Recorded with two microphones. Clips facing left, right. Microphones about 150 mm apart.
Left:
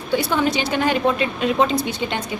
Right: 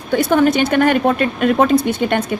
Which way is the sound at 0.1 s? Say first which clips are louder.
Right 6 dB; 50° right (ahead or behind).